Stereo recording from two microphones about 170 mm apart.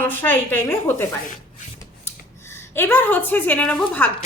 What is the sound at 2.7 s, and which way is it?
A woman's voice, 10° left (ahead or behind).